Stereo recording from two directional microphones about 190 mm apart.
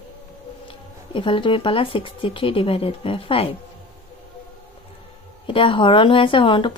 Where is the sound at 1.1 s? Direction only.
25° left (ahead or behind).